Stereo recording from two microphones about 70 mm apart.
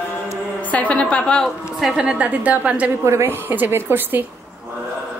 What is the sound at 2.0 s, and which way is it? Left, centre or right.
Speech, centre.